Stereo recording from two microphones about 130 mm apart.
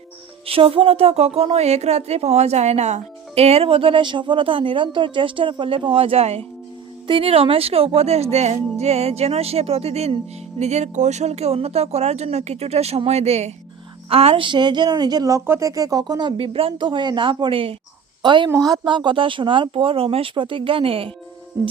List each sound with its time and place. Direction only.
0.4 s speech: 45° right (ahead or behind)
16.4 s a woman's voice: 45° right (ahead or behind)